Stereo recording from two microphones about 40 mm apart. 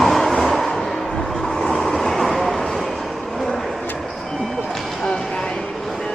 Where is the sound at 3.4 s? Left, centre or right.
Centre.